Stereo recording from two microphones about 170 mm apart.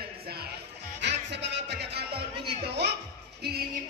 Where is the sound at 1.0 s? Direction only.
90° right.